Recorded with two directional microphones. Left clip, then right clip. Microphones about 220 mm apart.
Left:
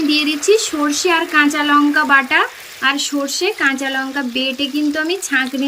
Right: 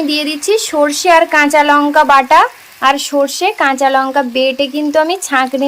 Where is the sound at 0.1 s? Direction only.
15° right (ahead or behind).